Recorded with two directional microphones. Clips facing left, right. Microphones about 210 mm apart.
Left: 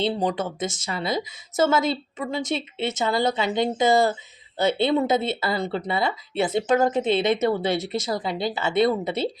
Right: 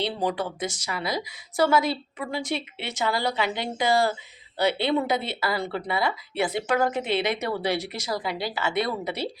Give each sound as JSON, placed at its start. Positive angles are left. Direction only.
{"t": 0.0, "sound": "a woman's voice", "side_deg": 20}